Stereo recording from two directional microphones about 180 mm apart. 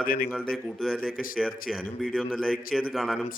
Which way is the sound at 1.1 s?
50° left (ahead or behind).